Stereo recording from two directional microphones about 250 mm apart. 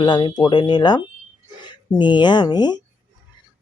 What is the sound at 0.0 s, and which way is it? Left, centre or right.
Speech, centre.